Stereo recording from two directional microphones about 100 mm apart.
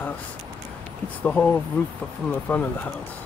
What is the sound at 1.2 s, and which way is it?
Speech, 10° left (ahead or behind).